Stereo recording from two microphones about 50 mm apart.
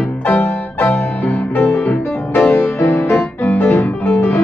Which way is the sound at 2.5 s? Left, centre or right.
Left.